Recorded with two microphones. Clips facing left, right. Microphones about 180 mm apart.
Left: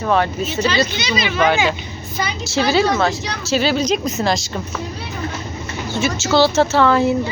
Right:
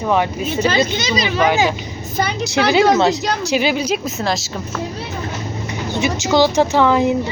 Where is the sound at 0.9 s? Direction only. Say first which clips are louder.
Right 2 dB; 40° right (ahead or behind).